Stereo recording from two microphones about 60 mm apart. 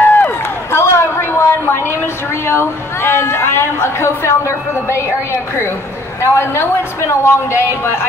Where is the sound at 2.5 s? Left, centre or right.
Left.